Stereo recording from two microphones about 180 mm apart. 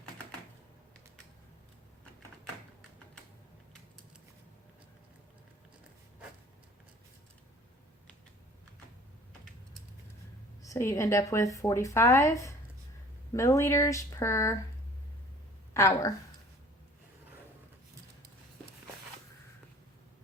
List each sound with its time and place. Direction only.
10.6 s a woman's voice: 15° left (ahead or behind)
15.7 s a woman's voice: 15° left (ahead or behind)